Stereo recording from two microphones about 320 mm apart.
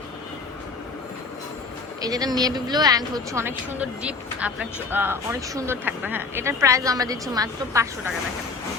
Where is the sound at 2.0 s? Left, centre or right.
Centre.